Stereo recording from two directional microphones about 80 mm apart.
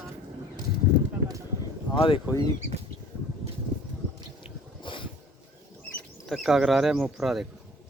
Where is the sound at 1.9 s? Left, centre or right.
Left.